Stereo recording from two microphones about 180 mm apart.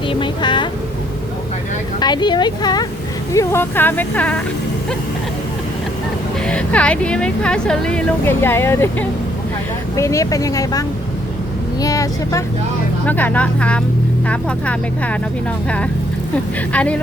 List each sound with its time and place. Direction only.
0.1 s a sound: 25° left (ahead or behind)
2.0 s speech: 25° left (ahead or behind); by 4.4 s 5° left (ahead or behind)
6.5 s speech: 5° left (ahead or behind)
16.7 s speech: 5° left (ahead or behind)